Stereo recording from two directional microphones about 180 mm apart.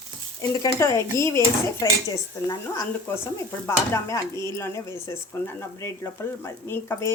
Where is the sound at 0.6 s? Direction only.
15° left (ahead or behind).